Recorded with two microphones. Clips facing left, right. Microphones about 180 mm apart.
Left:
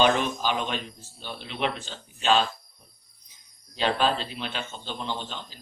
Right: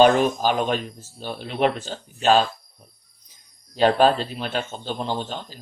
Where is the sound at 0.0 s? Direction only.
45° right (ahead or behind).